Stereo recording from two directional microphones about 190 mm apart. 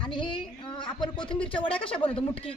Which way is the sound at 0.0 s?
25° left (ahead or behind).